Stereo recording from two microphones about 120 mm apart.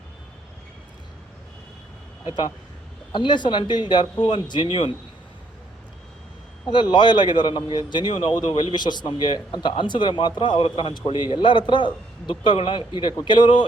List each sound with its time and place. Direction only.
2.2 s a man's voice: 35° left (ahead or behind)
6.9 s a man's voice: 40° left (ahead or behind)